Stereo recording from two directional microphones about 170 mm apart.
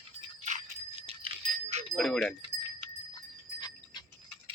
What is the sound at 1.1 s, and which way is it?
Dog, 35° right (ahead or behind).